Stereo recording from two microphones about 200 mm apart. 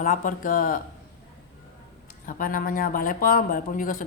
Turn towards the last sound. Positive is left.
turn(degrees=45)  # may be behind; listen again after turning